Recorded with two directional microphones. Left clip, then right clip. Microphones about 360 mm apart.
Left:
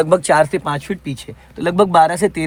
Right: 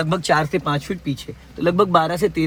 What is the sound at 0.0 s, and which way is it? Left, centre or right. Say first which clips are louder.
Speech: left 6 dB; centre.